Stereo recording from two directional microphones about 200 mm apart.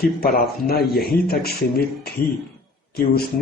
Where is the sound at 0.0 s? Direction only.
50° left (ahead or behind).